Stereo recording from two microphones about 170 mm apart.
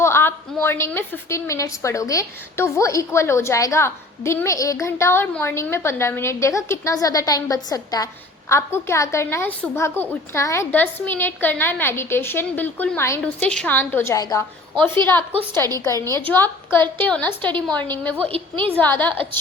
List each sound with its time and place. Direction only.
0.0 s a woman's voice: 15° left (ahead or behind)
15.8 s a woman's voice: 15° left (ahead or behind)
16.0 s a woman's voice: 25° right (ahead or behind)
17.0 s a woman's voice: 10° left (ahead or behind)
18.3 s a woman's voice: 35° right (ahead or behind)
18.8 s a woman's voice: 10° left (ahead or behind)